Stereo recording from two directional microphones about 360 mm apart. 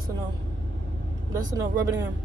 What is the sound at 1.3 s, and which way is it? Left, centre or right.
Speech, centre.